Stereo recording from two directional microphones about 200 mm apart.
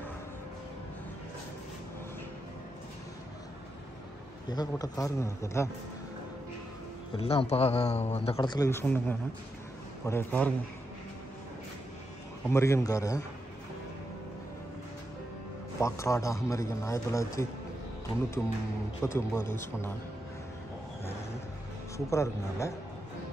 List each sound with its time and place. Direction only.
4.5 s a man's voice: 20° left (ahead or behind)
7.2 s a man's voice: 30° left (ahead or behind); by 10.5 s 10° left (ahead or behind)
12.4 s a man's voice: 15° left (ahead or behind)
15.8 s a man's voice: 15° left (ahead or behind)
19.0 s a man's voice: 15° left (ahead or behind)
21.9 s a man's voice: 15° left (ahead or behind)